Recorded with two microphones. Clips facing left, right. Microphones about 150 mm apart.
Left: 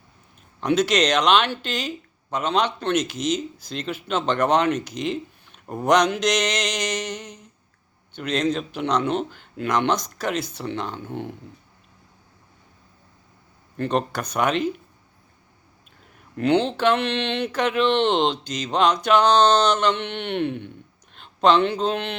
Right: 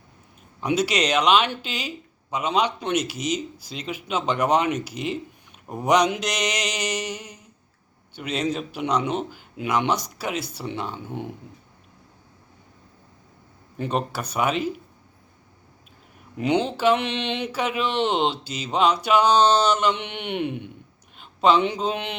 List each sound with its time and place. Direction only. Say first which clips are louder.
0.6 s speech: left 3 dB; 10° right (ahead or behind)
13.7 s speech: left 3 dB; 10° right (ahead or behind)
16.3 s speech: left 2 dB; 10° right (ahead or behind)